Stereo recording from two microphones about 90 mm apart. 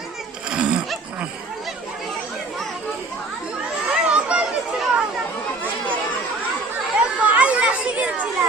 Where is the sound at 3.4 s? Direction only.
10° right (ahead or behind).